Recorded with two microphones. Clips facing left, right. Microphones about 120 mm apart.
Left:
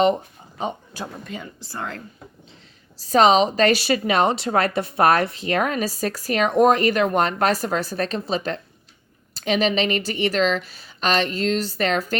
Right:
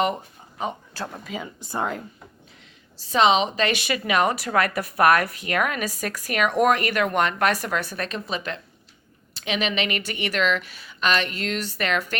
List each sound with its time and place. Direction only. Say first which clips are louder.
1.2 s speech: right 1 dB; 5° right (ahead or behind)
1.6 s speech: right 6 dB; 20° right (ahead or behind)
3.0 s a woman's voice: left 4 dB; 40° left (ahead or behind)